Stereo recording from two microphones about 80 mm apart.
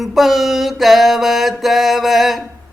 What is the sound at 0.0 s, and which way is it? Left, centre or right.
Mantra, centre.